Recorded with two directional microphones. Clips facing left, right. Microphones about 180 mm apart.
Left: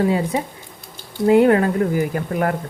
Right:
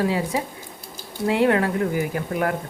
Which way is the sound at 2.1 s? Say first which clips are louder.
Left 3 dB; 45° left (ahead or behind).